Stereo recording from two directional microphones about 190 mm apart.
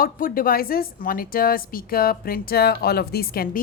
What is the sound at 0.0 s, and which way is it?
Speech, 50° left (ahead or behind).